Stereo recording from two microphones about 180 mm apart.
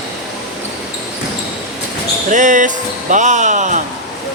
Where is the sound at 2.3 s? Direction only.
45° right (ahead or behind).